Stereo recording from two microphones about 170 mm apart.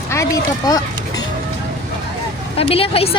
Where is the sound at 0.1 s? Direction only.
20° left (ahead or behind).